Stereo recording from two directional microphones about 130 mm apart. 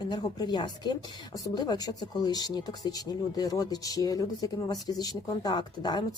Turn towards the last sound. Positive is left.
turn(degrees=35)  # may be behind; listen again after turning